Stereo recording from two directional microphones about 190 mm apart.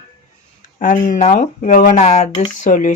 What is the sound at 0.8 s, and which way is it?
Speech, 45° left (ahead or behind).